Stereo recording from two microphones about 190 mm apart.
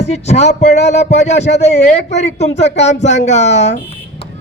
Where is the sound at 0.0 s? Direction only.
35° left (ahead or behind).